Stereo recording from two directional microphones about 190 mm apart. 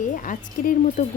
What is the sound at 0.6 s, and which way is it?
Speech, 45° left (ahead or behind).